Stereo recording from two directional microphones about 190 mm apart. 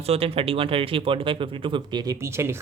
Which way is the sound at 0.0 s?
30° right (ahead or behind).